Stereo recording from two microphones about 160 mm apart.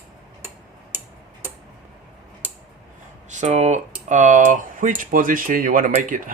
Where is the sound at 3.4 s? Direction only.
45° right (ahead or behind).